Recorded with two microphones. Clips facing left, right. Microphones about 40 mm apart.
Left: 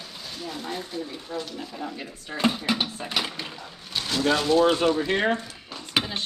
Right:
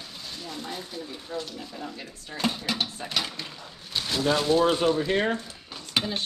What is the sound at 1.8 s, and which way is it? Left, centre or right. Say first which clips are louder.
Speech: left 3 dB; centre.